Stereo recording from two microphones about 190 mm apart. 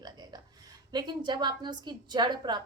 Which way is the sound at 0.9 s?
25° right (ahead or behind).